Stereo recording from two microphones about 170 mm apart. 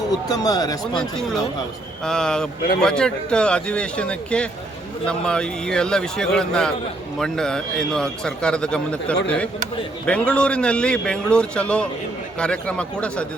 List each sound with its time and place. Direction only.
0.3 s speech: 20° left (ahead or behind)
0.9 s a man's voice: 5° left (ahead or behind)